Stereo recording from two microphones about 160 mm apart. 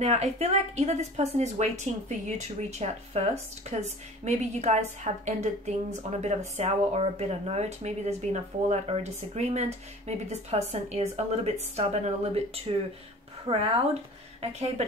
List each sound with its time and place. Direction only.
0.0 s a woman's voice: 45° right (ahead or behind)